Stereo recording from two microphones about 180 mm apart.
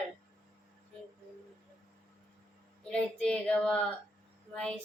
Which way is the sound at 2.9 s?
5° left (ahead or behind).